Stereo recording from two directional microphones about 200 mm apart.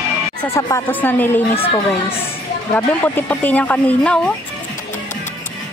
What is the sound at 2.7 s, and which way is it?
Speech, 10° left (ahead or behind).